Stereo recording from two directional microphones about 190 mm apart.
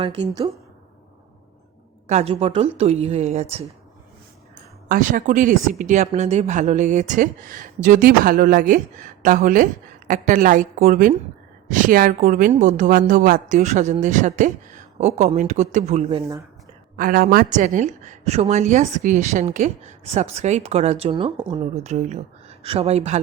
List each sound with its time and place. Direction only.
0.0 s a woman's voice: 25° right (ahead or behind)
2.0 s speech: 35° right (ahead or behind)
4.9 s speech: 45° right (ahead or behind)
17.0 s speech: 50° right (ahead or behind)